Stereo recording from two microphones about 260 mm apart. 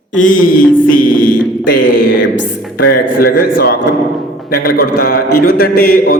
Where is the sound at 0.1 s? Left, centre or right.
Left.